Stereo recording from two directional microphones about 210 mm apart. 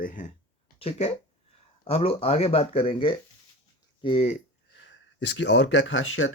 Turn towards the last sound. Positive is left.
turn(degrees=65)  # may be behind; listen again after turning